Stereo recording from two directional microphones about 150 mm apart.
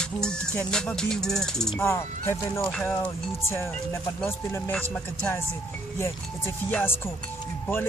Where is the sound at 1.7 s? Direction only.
15° left (ahead or behind).